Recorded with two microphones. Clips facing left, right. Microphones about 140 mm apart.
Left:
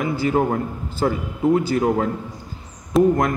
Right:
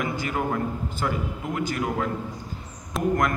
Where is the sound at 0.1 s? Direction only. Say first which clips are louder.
Left 7 dB; 35° left (ahead or behind).